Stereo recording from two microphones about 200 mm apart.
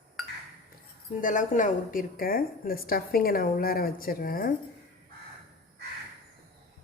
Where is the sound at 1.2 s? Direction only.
40° left (ahead or behind).